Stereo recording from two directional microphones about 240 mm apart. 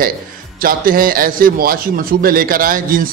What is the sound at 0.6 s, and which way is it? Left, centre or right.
A man's voice, right.